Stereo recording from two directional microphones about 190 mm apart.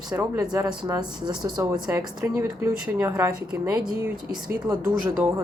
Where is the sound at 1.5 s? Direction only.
20° right (ahead or behind).